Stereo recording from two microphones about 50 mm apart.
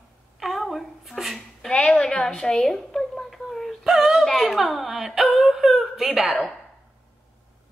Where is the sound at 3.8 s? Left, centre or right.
Centre.